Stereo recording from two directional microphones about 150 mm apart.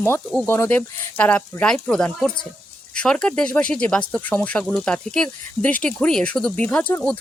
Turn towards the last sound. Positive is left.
turn(degrees=10)  # may be behind; listen again after turning